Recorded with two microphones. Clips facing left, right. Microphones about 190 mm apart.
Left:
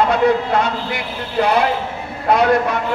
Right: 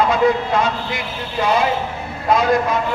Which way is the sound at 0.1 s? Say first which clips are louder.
Left 1 dB; 65° left (ahead or behind).